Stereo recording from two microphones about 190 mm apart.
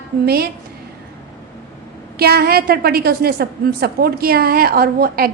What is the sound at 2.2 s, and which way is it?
A woman's voice, 55° right (ahead or behind).